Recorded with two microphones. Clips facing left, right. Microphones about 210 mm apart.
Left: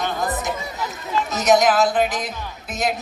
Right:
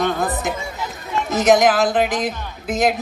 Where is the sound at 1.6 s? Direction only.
55° right (ahead or behind).